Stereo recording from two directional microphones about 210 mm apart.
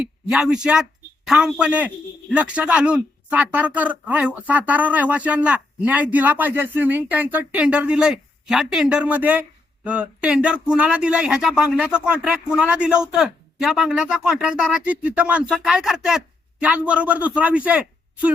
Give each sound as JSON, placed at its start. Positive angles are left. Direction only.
{"t": 0.0, "sound": "a woman's voice", "side_deg": 0}